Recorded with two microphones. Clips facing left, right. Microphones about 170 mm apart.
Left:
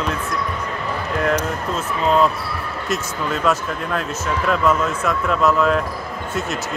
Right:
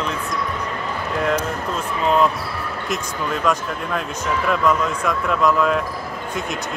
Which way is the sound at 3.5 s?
5° left (ahead or behind).